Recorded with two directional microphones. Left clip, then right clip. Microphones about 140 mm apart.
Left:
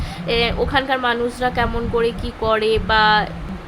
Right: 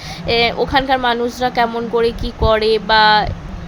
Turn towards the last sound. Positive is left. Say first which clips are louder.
# right 4 dB
turn(degrees=-25)  # may be behind; listen again after turning